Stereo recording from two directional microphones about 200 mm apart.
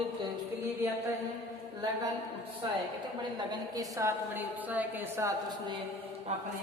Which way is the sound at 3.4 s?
20° right (ahead or behind).